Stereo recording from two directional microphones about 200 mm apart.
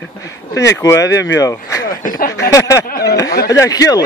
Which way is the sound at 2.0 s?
45° left (ahead or behind).